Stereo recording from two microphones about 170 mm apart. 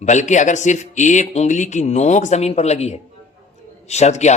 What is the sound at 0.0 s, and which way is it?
Speech, 45° left (ahead or behind).